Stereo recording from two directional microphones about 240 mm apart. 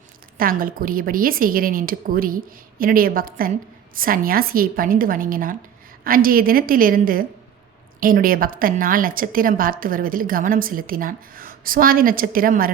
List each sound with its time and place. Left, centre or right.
0.3 s a woman's voice: right